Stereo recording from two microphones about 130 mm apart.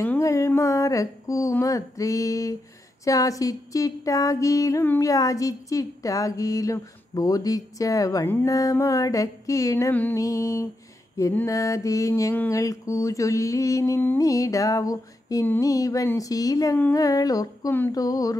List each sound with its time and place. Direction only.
0.0 s speech: 20° left (ahead or behind)
17.6 s a sound: 15° left (ahead or behind)
17.9 s speech: 25° left (ahead or behind)